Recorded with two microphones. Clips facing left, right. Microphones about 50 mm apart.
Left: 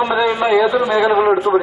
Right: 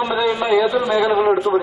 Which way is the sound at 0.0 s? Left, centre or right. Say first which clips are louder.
Left 3 dB; centre.